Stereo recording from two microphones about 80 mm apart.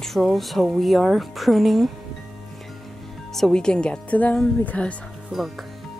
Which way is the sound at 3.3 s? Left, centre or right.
Centre.